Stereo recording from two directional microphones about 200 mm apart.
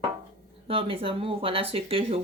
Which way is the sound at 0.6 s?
30° right (ahead or behind).